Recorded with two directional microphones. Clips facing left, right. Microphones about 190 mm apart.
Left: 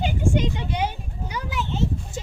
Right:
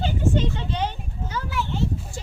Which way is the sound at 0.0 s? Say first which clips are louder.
Even; 15° left (ahead or behind).